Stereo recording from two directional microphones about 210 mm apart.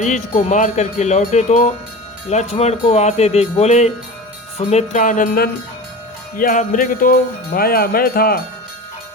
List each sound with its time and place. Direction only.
0.0 s music: 35° left (ahead or behind)
6.3 s speech: 40° left (ahead or behind)